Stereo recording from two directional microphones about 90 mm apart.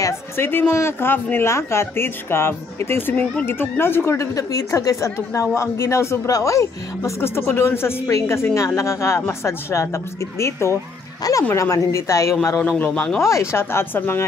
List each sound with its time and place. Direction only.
0.4 s a woman's voice: 25° left (ahead or behind)
12.6 s a man's voice: 20° left (ahead or behind)
13.2 s speech: 30° left (ahead or behind)